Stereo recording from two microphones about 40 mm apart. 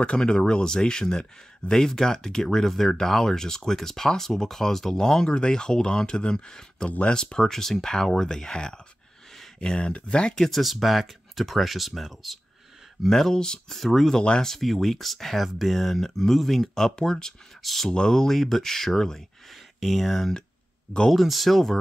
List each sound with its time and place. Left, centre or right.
0.0 s speech: left
10.4 s speech: centre
13.1 s speech: centre
13.7 s speech: centre
14.1 s speech: centre
14.5 s speech: centre